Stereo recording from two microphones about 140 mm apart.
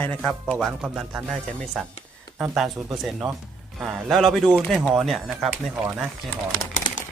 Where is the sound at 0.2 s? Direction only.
Centre (ahead or behind).